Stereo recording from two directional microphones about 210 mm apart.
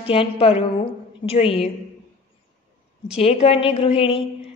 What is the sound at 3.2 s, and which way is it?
A woman's voice, 30° left (ahead or behind).